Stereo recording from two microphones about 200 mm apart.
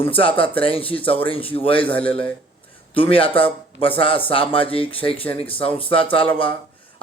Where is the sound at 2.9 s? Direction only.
25° left (ahead or behind).